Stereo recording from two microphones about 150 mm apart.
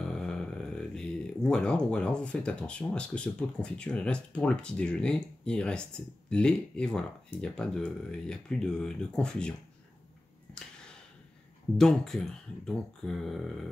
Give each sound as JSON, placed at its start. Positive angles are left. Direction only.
{"t": 0.0, "sound": "speech", "side_deg": 5}
{"t": 11.8, "sound": "speech", "side_deg": 5}